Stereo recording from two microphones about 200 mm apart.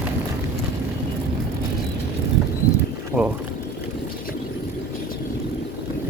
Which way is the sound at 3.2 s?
5° right (ahead or behind).